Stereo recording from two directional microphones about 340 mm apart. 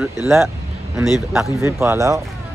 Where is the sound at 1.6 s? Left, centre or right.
Centre.